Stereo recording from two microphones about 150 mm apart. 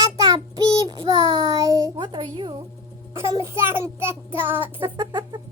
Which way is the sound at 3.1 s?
20° right (ahead or behind).